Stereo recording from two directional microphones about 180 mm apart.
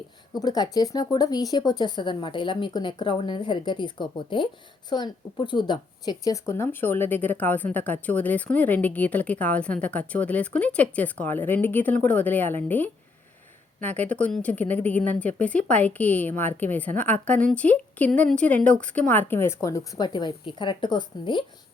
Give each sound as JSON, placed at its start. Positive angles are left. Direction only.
{"t": 0.3, "sound": "a woman's voice", "side_deg": 20}